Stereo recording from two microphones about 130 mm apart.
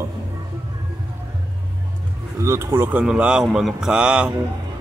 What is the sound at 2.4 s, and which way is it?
A man's voice, 20° right (ahead or behind).